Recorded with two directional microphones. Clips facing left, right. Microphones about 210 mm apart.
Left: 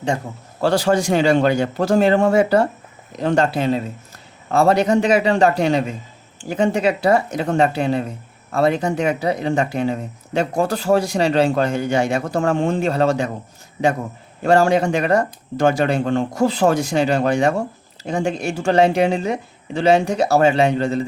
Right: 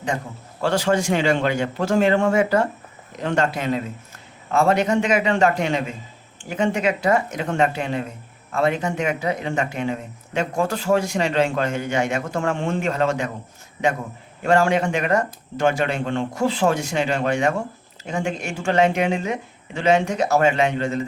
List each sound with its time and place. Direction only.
0.6 s speech: 35° left (ahead or behind)
14.4 s speech: 35° left (ahead or behind)